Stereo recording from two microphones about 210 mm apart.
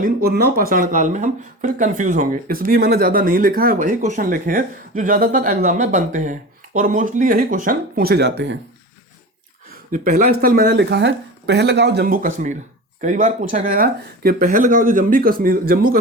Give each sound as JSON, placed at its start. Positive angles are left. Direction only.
{"t": 0.0, "sound": "speech", "side_deg": -45}
{"t": 9.9, "sound": "speech", "side_deg": -40}